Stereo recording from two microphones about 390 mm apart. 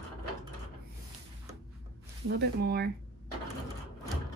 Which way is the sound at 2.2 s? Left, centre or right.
Right.